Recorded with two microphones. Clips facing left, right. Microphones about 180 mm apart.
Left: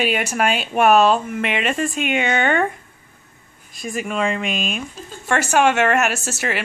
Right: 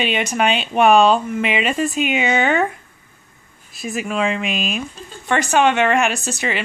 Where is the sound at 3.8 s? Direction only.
5° right (ahead or behind).